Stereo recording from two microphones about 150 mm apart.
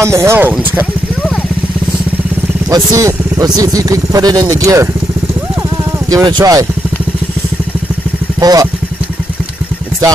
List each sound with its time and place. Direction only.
0.0 s speech: 20° right (ahead or behind)
2.7 s speech: 20° right (ahead or behind)
6.0 s speech: 25° right (ahead or behind)
8.4 s speech: 25° right (ahead or behind)